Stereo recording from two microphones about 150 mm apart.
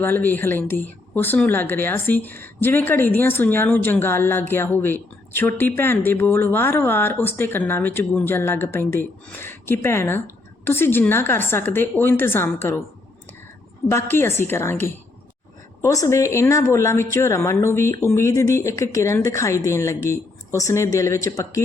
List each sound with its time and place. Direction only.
0.0 s speech: 15° left (ahead or behind)
13.8 s a woman's voice: 15° left (ahead or behind)